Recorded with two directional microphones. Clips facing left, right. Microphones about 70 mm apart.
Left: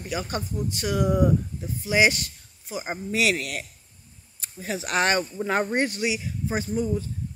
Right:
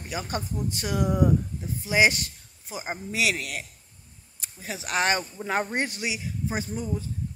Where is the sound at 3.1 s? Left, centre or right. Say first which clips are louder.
Left 3 dB; centre.